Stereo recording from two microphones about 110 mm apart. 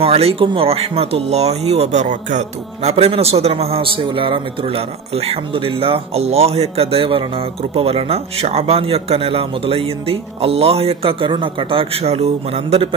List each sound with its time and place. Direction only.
0.0 s speech: 65° right (ahead or behind)